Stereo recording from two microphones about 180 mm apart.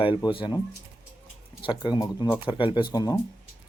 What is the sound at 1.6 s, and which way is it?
Speech, 25° left (ahead or behind).